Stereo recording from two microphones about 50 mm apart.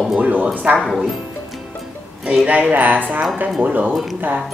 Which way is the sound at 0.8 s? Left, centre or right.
Centre.